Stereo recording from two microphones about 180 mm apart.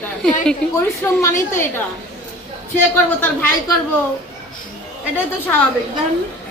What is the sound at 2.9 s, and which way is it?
Speech, 10° left (ahead or behind).